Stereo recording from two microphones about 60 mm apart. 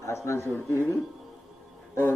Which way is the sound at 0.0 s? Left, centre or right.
Left.